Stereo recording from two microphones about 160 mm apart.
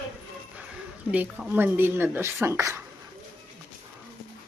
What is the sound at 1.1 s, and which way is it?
Speech, 10° right (ahead or behind).